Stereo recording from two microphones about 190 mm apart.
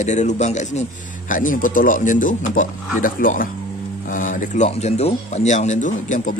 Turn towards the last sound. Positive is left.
turn(degrees=40)  # may be behind; listen again after turning